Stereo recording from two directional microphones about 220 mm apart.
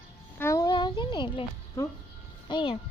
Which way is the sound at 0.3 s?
15° left (ahead or behind).